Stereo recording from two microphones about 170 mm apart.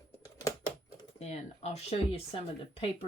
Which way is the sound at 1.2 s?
40° left (ahead or behind).